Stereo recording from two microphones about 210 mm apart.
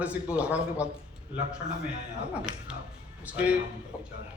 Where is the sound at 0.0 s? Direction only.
5° right (ahead or behind).